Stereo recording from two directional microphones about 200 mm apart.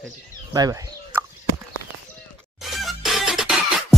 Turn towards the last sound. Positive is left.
turn(degrees=0)  # may be behind; listen again after turning